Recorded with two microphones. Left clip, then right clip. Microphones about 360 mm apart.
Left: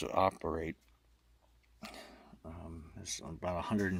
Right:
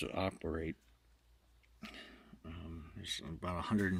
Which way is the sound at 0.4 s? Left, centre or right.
Left.